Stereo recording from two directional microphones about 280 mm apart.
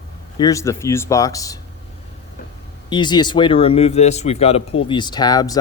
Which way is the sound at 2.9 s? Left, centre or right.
Centre.